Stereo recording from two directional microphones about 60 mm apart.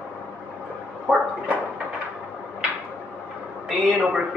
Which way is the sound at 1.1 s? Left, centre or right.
Centre.